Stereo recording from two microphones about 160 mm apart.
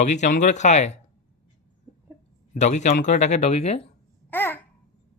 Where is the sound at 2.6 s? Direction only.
45° left (ahead or behind).